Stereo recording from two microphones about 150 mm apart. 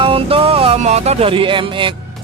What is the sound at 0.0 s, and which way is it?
Music, 40° right (ahead or behind).